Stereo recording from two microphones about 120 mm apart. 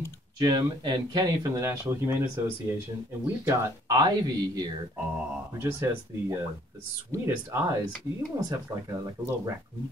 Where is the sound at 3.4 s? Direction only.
35° right (ahead or behind).